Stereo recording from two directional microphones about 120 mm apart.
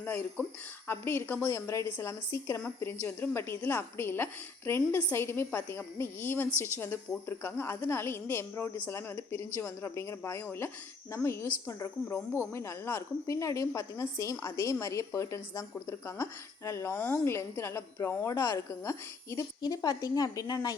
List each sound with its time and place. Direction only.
0.0 s a woman's voice: 15° left (ahead or behind); by 20.7 s 30° left (ahead or behind)